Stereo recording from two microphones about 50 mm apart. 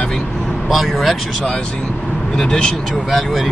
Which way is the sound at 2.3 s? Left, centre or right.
Centre.